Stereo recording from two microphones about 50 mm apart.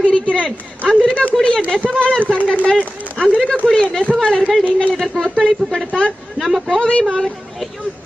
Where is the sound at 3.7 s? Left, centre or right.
Centre.